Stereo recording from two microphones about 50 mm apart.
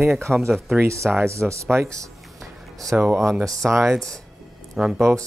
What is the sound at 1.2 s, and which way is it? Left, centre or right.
Speech, right.